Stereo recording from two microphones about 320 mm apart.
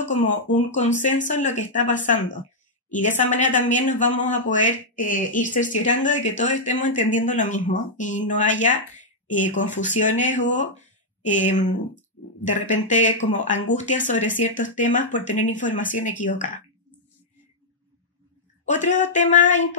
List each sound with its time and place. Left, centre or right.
0.1 s speech: left
18.7 s speech: left